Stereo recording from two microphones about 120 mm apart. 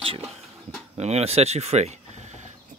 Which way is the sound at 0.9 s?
60° right (ahead or behind).